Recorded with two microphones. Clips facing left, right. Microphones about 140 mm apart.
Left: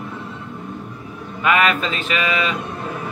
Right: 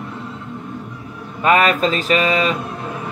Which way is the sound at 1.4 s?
35° right (ahead or behind).